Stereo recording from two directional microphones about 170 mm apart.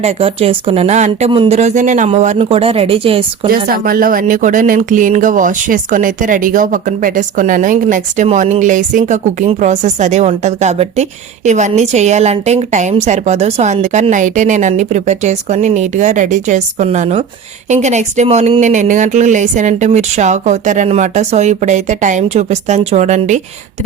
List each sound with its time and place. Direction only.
0.0 s speech: 35° right (ahead or behind)
3.5 s speech: 60° right (ahead or behind)